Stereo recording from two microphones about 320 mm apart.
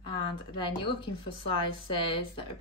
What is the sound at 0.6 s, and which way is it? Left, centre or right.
A woman's voice, centre.